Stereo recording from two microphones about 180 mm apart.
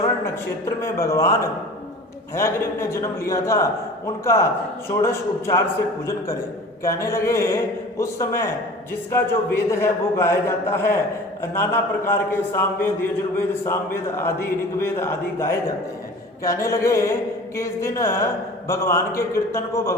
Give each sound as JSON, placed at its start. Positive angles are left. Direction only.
{"t": 0.6, "sound": "a man's voice", "side_deg": 15}
{"t": 6.8, "sound": "a man's voice", "side_deg": 15}